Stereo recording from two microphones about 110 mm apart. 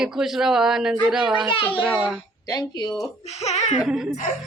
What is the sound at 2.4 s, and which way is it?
Speech, 40° left (ahead or behind).